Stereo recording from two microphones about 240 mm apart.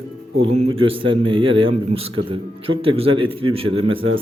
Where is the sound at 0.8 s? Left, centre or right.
Right.